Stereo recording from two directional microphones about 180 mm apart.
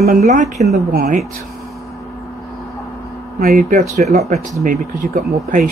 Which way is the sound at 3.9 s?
40° right (ahead or behind).